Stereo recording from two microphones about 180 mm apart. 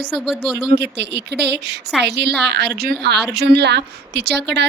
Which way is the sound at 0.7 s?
70° right (ahead or behind).